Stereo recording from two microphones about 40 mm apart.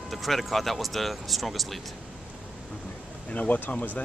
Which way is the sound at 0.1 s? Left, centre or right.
Centre.